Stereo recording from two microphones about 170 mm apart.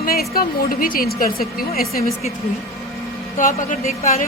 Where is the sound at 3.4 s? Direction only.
50° left (ahead or behind).